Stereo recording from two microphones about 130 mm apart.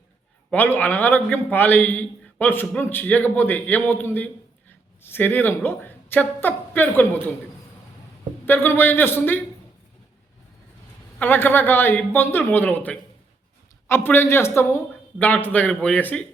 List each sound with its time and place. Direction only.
0.5 s a man's voice: 15° left (ahead or behind)
8.4 s a man's voice: 15° left (ahead or behind)
11.2 s a man's voice: 15° left (ahead or behind)